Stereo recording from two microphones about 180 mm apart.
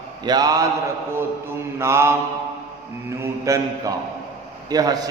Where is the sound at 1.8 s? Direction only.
15° right (ahead or behind).